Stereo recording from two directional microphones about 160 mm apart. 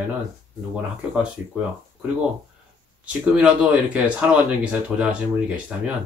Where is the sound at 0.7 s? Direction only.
5° right (ahead or behind).